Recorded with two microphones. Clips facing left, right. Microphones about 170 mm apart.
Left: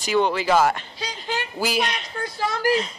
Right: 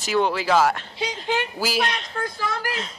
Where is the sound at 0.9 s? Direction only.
20° right (ahead or behind).